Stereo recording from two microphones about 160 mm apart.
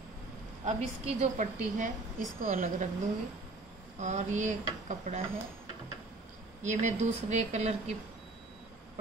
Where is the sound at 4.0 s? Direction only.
50° right (ahead or behind).